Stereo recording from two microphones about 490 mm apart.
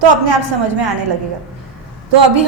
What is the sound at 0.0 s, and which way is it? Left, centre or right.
Speech, right.